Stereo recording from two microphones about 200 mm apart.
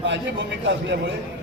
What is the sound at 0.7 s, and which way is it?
Speech, 65° right (ahead or behind).